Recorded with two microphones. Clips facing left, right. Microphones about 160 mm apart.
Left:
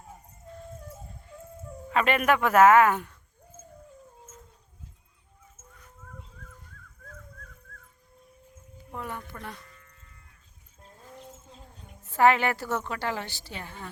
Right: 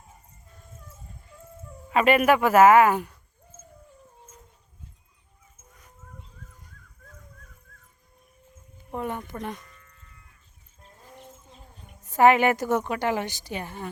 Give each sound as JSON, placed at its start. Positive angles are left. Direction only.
{"t": 1.9, "sound": "a woman's voice", "side_deg": -10}
{"t": 8.9, "sound": "a sound", "side_deg": -25}
{"t": 12.0, "sound": "a woman's voice", "side_deg": -15}